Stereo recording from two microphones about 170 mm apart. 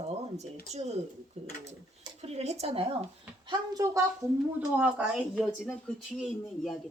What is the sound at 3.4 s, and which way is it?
Speech, 20° right (ahead or behind).